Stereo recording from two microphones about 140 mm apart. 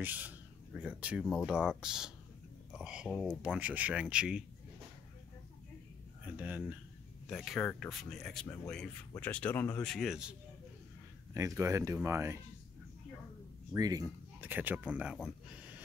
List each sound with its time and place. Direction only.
0.0 s speech: 10° right (ahead or behind)
3.4 s speech: 10° right (ahead or behind)
6.2 s speech: 10° right (ahead or behind)
7.2 s speech: centre (ahead or behind)
11.3 s speech: 20° right (ahead or behind)
13.7 s speech: 25° right (ahead or behind)
14.4 s speech: 10° right (ahead or behind)